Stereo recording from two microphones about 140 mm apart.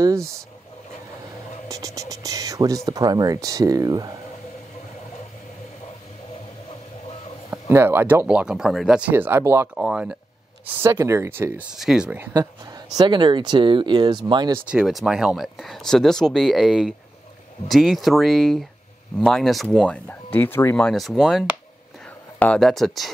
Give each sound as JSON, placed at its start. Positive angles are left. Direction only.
{"t": 1.7, "sound": "speech", "side_deg": -25}
{"t": 7.6, "sound": "speech", "side_deg": -15}
{"t": 9.8, "sound": "speech", "side_deg": -5}
{"t": 10.8, "sound": "speech", "side_deg": -20}
{"t": 11.7, "sound": "speech", "side_deg": -5}
{"t": 12.9, "sound": "speech", "side_deg": -30}
{"t": 14.7, "sound": "speech", "side_deg": -5}